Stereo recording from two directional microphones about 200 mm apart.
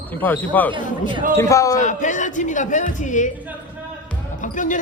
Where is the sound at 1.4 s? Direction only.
15° left (ahead or behind).